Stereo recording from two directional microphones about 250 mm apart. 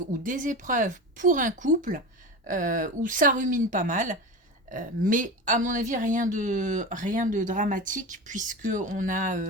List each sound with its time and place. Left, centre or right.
0.2 s a woman's voice: right